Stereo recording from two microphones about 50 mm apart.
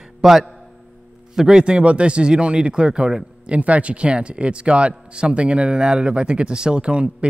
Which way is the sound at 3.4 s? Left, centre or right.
Right.